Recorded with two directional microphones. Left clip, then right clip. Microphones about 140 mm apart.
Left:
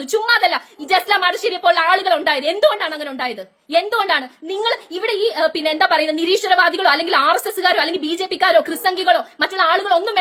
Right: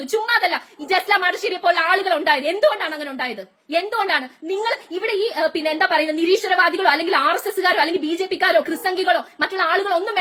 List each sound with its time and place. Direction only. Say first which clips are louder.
0.1 s a woman's voice: left 4 dB; 25° left (ahead or behind)